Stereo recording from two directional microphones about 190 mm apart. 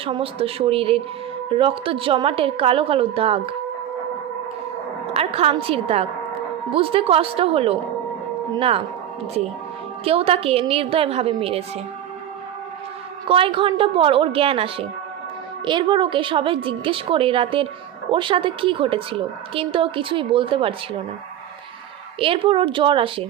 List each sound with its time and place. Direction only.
0.0 s a woman's voice: 30° right (ahead or behind)
5.1 s a woman's voice: 30° right (ahead or behind)
10.0 s a woman's voice: 30° right (ahead or behind)
13.2 s a woman's voice: 30° right (ahead or behind)
22.2 s a woman's voice: 30° right (ahead or behind)